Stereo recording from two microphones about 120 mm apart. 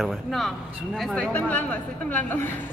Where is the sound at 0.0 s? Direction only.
Centre (ahead or behind).